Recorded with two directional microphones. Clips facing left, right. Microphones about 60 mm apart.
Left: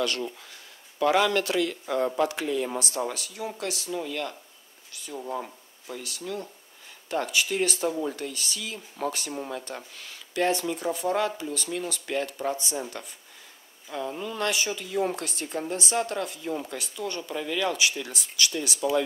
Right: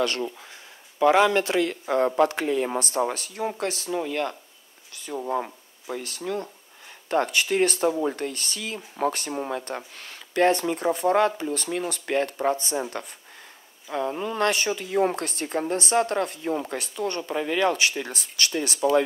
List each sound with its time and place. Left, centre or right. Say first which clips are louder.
0.0 s speech: right 3 dB; right
0.4 s a woman's voice: right 3 dB; right
13.8 s a woman's voice: right 5 dB; right